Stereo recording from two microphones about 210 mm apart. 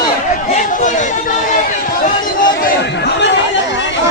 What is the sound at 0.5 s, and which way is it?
Chatter, 35° left (ahead or behind).